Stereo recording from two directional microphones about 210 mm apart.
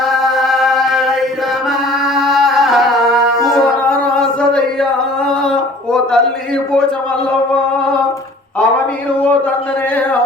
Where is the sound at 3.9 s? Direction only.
5° left (ahead or behind).